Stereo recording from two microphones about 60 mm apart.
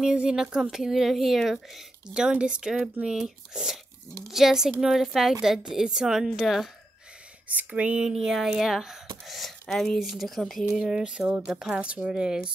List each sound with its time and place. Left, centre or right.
0.0 s a woman's voice: centre
2.1 s a woman's voice: centre
7.4 s speech: right
8.1 s a woman's voice: centre
9.9 s a woman's voice: centre
11.8 s a woman's voice: centre